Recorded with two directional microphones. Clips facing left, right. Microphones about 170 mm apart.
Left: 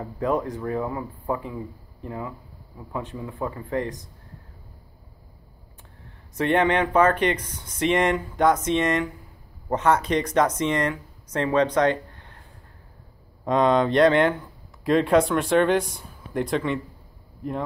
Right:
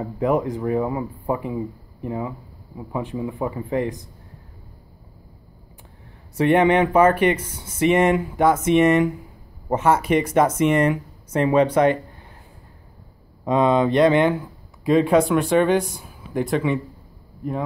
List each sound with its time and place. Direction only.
0.0 s speech: 15° right (ahead or behind)
6.3 s speech: 10° right (ahead or behind)
13.5 s speech: 5° right (ahead or behind)